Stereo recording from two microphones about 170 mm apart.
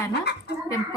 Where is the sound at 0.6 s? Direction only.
20° left (ahead or behind).